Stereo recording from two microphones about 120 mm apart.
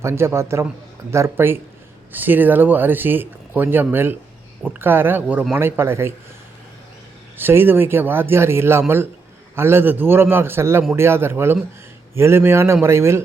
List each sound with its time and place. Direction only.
0.0 s speech: 20° right (ahead or behind)
7.3 s speech: 15° right (ahead or behind)